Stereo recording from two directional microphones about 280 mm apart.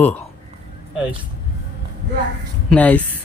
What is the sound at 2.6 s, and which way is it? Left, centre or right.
Speech, centre.